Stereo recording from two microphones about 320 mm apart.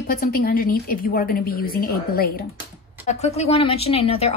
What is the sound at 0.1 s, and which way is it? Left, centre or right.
Speech, left.